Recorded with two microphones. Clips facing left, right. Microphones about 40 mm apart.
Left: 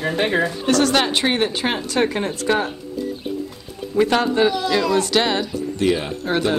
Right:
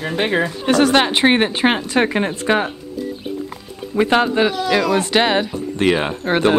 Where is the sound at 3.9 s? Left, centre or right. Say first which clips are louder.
Right 2 dB; right.